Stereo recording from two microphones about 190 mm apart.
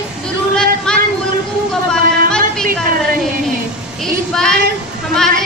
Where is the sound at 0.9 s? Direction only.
5° left (ahead or behind).